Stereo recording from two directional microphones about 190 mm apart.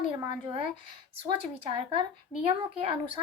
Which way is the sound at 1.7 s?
25° right (ahead or behind).